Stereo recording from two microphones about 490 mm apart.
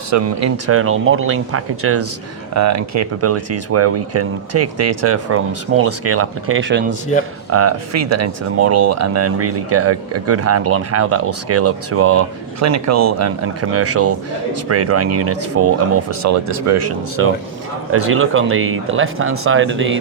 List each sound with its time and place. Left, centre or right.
0.1 s speech: right